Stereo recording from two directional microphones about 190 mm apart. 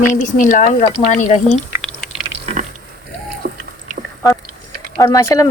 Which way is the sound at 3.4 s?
50° right (ahead or behind).